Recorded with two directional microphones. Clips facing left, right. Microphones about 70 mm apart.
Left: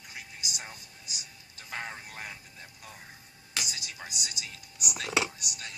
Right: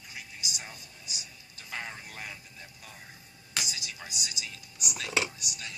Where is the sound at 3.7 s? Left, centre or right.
Left.